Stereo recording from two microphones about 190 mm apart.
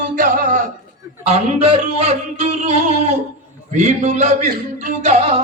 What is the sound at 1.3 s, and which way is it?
Speech, 35° right (ahead or behind).